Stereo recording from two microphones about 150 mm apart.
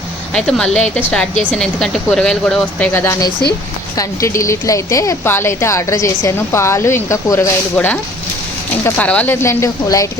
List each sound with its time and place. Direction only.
0.3 s a woman's voice: 5° left (ahead or behind); by 10.1 s 20° left (ahead or behind)